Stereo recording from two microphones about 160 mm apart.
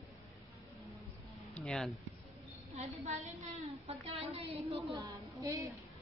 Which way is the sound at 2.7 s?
45° right (ahead or behind).